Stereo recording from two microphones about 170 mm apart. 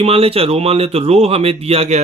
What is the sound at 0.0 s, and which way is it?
Speech, 35° right (ahead or behind).